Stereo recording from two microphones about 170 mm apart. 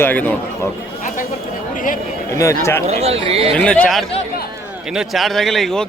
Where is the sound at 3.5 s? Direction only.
5° left (ahead or behind).